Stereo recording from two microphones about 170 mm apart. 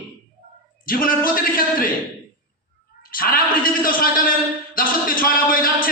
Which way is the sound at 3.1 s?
55° left (ahead or behind).